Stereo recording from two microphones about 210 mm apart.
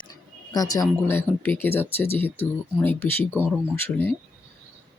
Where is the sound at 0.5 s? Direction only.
15° left (ahead or behind).